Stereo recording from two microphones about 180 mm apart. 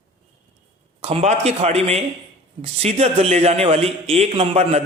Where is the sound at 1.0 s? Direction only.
35° right (ahead or behind).